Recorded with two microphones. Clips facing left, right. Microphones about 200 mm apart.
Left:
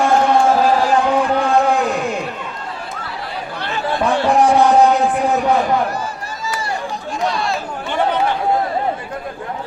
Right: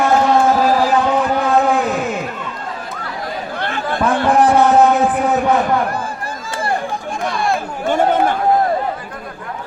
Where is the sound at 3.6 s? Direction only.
55° right (ahead or behind).